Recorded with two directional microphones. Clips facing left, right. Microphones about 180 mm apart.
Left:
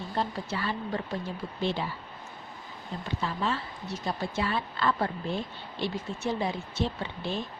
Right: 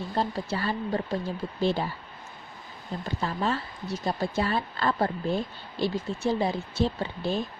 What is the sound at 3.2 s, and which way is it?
Speech, 40° right (ahead or behind).